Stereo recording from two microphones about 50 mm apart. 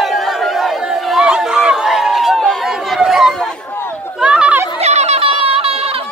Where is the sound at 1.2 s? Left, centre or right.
Centre.